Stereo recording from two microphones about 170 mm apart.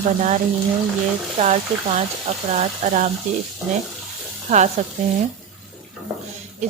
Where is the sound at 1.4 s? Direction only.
35° right (ahead or behind).